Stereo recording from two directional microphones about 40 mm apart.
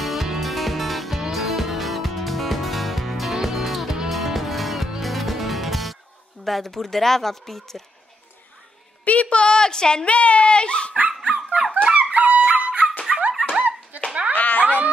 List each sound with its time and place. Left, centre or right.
0.0 s music: centre
6.4 s speech: centre
9.0 s a woman's voice: left; by 10.0 s centre
10.0 s speech: left
11.2 s dog: right
11.7 s music: right
12.0 s music: right
12.4 s dog: right
13.6 s a sound: right
14.3 s whip: left
14.6 s dog: right